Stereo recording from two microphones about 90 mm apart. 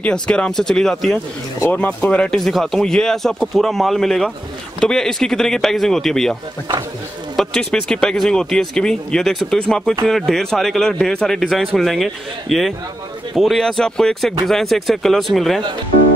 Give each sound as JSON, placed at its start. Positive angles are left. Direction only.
{"t": 0.0, "sound": "speech", "side_deg": 10}
{"t": 1.7, "sound": "speech", "side_deg": 20}
{"t": 2.4, "sound": "a man's voice", "side_deg": 5}
{"t": 7.3, "sound": "a man's voice", "side_deg": 5}